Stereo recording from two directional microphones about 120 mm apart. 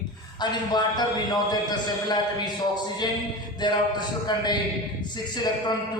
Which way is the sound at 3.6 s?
35° left (ahead or behind).